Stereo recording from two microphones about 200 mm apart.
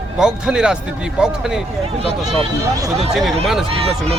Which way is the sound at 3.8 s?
30° right (ahead or behind).